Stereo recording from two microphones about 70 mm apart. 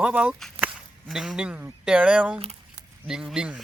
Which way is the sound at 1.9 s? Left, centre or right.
Centre.